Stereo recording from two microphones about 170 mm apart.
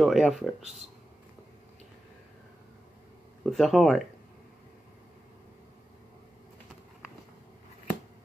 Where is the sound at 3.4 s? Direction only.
Centre (ahead or behind).